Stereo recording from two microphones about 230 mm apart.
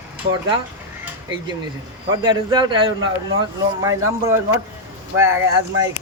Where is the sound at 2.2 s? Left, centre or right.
Centre.